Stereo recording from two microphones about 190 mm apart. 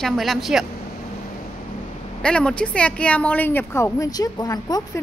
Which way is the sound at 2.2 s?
5° left (ahead or behind).